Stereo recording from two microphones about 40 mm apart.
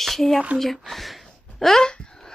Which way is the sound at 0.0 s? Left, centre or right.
Centre.